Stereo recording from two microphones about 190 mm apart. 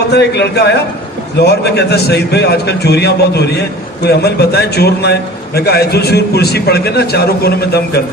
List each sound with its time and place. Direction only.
0.1 s a man's voice: 60° left (ahead or behind)